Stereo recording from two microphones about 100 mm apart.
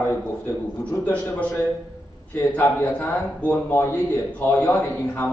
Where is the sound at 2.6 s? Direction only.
20° left (ahead or behind).